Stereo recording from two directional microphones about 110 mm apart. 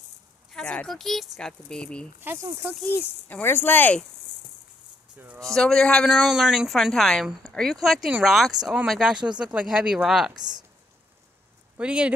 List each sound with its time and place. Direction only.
0.5 s speech: 5° left (ahead or behind)
2.2 s speech: 30° right (ahead or behind)
2.8 s speech: 15° left (ahead or behind)
5.2 s speech: 15° right (ahead or behind)
5.5 s speech: 5° left (ahead or behind)
6.0 s speech: 5° right (ahead or behind)
10.3 s speech: 40° right (ahead or behind)
11.7 s speech: 10° right (ahead or behind)